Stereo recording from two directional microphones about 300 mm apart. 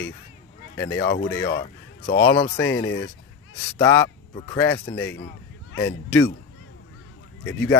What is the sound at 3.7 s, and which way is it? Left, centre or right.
Speech, centre.